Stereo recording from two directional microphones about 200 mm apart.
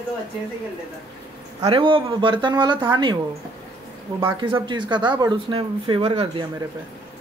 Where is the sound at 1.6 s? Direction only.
25° right (ahead or behind).